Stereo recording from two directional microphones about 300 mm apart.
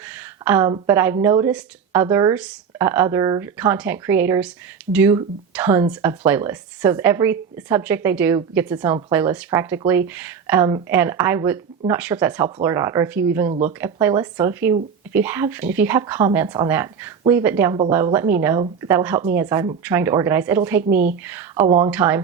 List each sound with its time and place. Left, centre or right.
0.1 s a woman's voice: centre
13.5 s speech: right
13.8 s a woman's voice: centre